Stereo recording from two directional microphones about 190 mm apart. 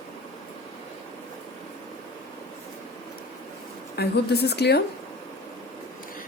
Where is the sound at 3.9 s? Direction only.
60° left (ahead or behind).